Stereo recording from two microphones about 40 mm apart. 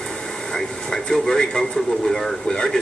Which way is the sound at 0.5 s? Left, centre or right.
Centre.